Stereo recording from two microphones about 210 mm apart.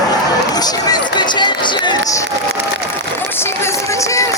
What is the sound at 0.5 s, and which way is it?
Speech, 20° left (ahead or behind).